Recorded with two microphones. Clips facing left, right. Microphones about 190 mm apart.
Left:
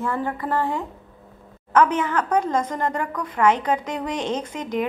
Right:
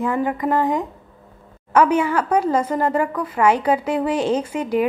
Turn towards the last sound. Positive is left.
turn(degrees=-10)  # may be behind; listen again after turning